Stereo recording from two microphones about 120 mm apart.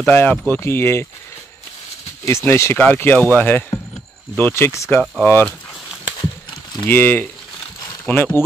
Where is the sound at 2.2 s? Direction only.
25° left (ahead or behind).